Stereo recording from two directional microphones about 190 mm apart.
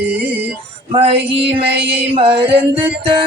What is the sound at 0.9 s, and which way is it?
Music, 30° right (ahead or behind).